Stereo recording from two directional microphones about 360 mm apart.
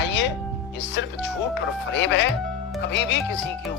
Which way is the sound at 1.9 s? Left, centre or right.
Left.